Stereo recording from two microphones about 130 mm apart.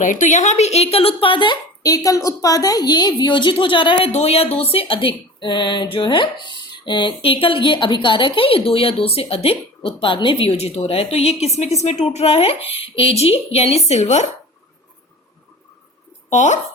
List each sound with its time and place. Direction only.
0.0 s speech: 80° left; by 1.5 s 40° left (ahead or behind)
1.8 s a woman's voice: 25° left (ahead or behind)
4.1 s speech: 50° left (ahead or behind)
16.3 s speech: 65° left (ahead or behind)